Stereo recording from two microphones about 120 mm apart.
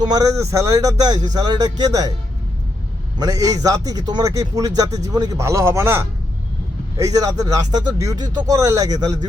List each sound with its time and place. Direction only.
0.1 s speech: 30° right (ahead or behind)
3.2 s speech: 30° right (ahead or behind)